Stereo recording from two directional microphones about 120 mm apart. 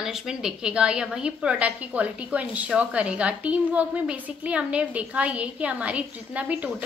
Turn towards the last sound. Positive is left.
turn(degrees=-10)  # may be behind; listen again after turning